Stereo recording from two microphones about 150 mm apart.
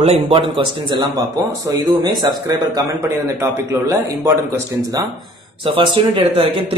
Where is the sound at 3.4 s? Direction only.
20° right (ahead or behind).